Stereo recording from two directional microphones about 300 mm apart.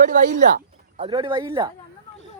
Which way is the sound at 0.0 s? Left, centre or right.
Right.